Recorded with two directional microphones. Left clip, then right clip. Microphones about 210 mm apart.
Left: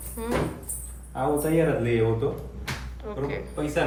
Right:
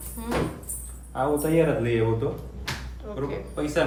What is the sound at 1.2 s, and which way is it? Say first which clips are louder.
A man's voice: right 1 dB; centre (ahead or behind).